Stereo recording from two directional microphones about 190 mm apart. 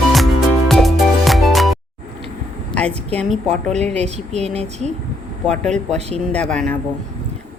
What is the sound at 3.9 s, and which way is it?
Speech, 35° right (ahead or behind).